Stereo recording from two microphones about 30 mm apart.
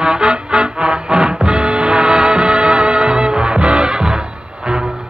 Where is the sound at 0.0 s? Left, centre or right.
Right.